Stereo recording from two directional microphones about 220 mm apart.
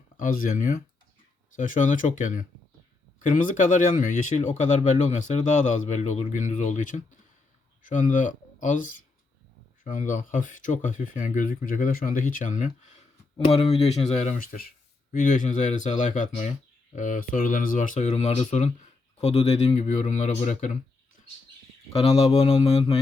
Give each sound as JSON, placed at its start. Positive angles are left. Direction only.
{"t": 0.2, "sound": "speech", "side_deg": 40}
{"t": 21.9, "sound": "mantra", "side_deg": 30}